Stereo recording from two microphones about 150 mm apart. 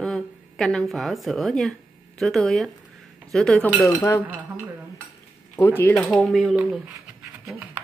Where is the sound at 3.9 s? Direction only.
20° left (ahead or behind).